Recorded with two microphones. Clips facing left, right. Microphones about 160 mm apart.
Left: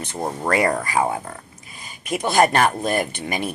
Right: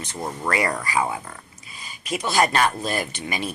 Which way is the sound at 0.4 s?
45° left (ahead or behind).